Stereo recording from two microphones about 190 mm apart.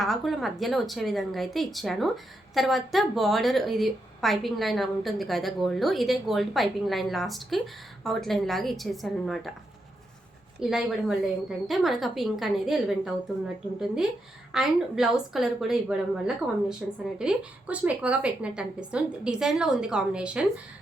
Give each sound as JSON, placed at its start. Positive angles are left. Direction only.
{"t": 0.0, "sound": "speech", "side_deg": 0}
{"t": 10.6, "sound": "speech", "side_deg": 0}